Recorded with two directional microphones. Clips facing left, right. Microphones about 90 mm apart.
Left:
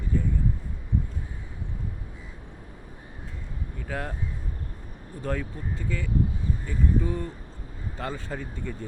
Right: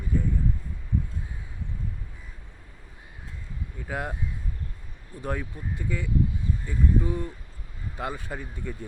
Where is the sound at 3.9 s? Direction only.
15° right (ahead or behind).